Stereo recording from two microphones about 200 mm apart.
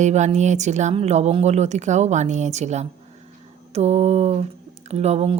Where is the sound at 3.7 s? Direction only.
35° right (ahead or behind).